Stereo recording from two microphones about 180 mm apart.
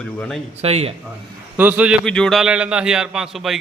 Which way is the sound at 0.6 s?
35° right (ahead or behind).